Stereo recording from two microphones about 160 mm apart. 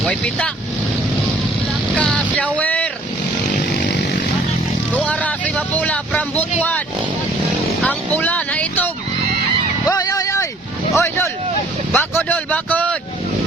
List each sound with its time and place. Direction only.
0.0 s speech: 5° left (ahead or behind)
2.0 s vehicle: 5° left (ahead or behind)
4.9 s vehicle: 10° left (ahead or behind)
6.6 s speech: 10° left (ahead or behind)
7.9 s vehicle: 10° left (ahead or behind)
9.8 s a sound: 20° left (ahead or behind)
10.9 s vehicle: 15° left (ahead or behind)
11.9 s speech: 10° left (ahead or behind)